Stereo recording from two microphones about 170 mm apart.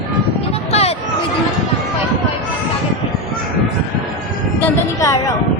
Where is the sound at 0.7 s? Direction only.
35° left (ahead or behind).